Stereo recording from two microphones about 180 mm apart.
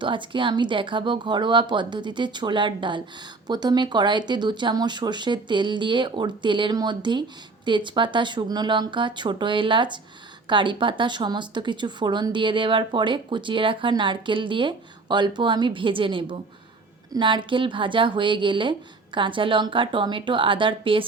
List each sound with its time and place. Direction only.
0.0 s speech: 25° right (ahead or behind)